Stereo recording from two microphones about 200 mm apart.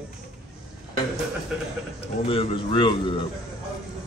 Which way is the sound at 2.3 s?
25° left (ahead or behind).